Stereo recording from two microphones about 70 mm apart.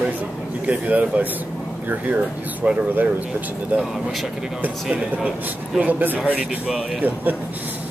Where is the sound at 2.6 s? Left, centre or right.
Right.